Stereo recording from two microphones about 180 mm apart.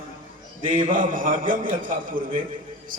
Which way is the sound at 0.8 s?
45° right (ahead or behind).